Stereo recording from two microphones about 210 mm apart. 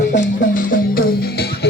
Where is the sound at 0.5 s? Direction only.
40° left (ahead or behind).